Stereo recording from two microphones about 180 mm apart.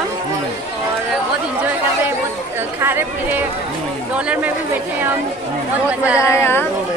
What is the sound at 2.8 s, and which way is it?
A man's voice, 10° right (ahead or behind).